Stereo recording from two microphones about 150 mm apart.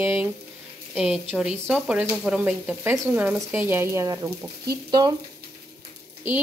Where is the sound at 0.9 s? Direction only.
5° right (ahead or behind).